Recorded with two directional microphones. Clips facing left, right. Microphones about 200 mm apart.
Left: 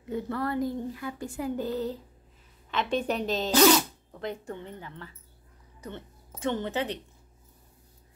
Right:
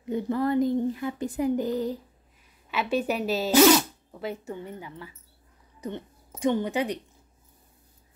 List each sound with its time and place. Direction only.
0.1 s a woman's voice: 15° right (ahead or behind)